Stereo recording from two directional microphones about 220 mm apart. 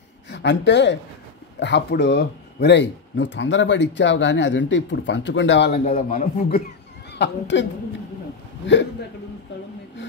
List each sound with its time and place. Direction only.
0.3 s a woman's voice: 50° left (ahead or behind)
5.7 s a man's voice: 40° left (ahead or behind)
7.2 s speech: 55° left (ahead or behind)